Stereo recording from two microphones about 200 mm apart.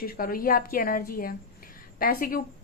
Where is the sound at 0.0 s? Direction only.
50° left (ahead or behind).